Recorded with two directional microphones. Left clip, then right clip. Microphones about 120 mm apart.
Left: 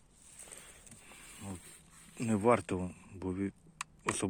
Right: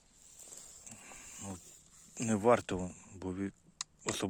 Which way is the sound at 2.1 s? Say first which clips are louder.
Right 1 dB; 25° right (ahead or behind).